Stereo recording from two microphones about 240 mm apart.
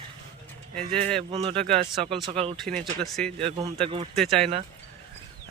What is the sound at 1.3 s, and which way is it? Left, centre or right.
Speech, right.